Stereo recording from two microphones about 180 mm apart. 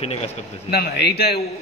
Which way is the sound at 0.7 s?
65° left (ahead or behind).